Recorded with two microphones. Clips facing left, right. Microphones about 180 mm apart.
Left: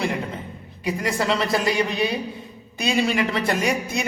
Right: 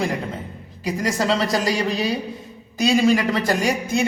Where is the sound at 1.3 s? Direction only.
35° right (ahead or behind).